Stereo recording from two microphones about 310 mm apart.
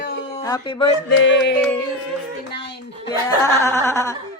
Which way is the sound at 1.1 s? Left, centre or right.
Left.